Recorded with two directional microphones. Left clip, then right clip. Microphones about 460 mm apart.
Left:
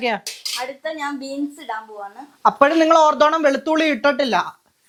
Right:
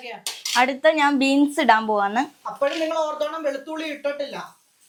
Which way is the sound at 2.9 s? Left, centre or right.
Left.